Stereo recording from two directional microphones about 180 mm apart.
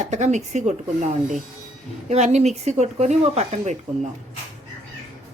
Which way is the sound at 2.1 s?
35° right (ahead or behind).